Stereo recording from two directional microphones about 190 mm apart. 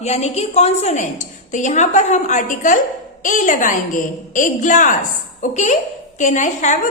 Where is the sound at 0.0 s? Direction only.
35° left (ahead or behind).